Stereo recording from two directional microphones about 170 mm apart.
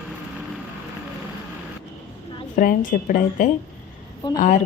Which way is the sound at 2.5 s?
50° left (ahead or behind).